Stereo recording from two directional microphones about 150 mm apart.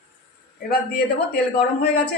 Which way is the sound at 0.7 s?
90° left.